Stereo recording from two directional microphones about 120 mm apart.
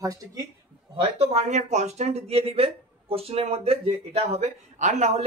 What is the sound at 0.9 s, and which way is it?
Speech, 55° right (ahead or behind).